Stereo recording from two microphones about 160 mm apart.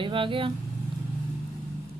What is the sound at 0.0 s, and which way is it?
Speech, 30° right (ahead or behind).